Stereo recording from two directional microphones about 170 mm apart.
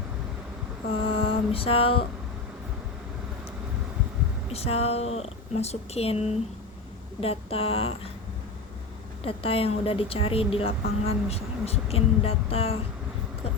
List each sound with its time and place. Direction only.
0.9 s mantra: 30° left (ahead or behind)
4.5 s speech: 35° left (ahead or behind)
9.2 s speech: 35° left (ahead or behind)